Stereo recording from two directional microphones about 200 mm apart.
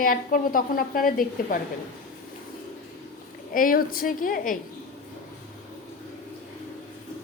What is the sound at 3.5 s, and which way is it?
A woman's voice, 45° left (ahead or behind).